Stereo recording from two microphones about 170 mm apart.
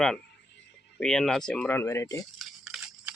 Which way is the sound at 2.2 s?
Centre (ahead or behind).